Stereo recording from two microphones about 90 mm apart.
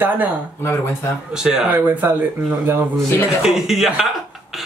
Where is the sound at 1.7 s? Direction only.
20° right (ahead or behind).